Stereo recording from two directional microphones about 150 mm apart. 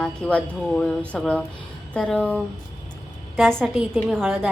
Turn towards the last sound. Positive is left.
turn(degrees=0)  # may be behind; listen again after turning